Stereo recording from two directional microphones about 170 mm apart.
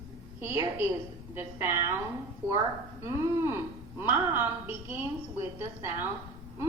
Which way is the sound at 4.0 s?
10° right (ahead or behind).